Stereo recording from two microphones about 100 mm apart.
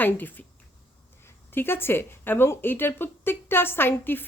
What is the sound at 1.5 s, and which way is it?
A woman's voice, 20° left (ahead or behind).